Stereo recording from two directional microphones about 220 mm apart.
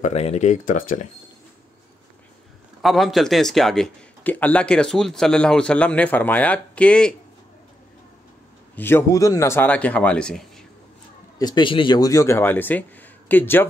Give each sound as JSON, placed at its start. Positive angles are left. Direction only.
{"t": 0.0, "sound": "speech", "side_deg": 30}
{"t": 2.8, "sound": "speech", "side_deg": 0}
{"t": 8.7, "sound": "speech", "side_deg": 10}
{"t": 11.3, "sound": "speech", "side_deg": 20}